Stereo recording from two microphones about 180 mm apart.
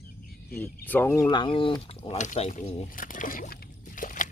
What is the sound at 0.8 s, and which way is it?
Speech, 10° left (ahead or behind).